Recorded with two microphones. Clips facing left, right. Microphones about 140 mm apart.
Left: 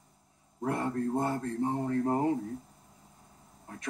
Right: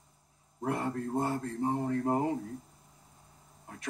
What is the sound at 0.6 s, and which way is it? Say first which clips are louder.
Speech: left 2 dB; 35° left (ahead or behind).